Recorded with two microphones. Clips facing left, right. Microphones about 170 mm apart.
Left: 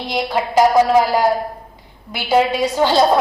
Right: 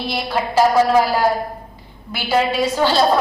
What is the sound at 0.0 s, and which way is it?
A woman's voice, 15° left (ahead or behind).